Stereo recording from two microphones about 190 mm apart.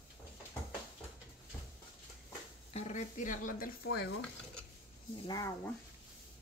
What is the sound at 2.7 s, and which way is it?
Speech, 35° left (ahead or behind).